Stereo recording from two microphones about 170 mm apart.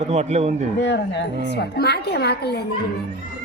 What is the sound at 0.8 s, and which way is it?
A woman's voice, 90° left.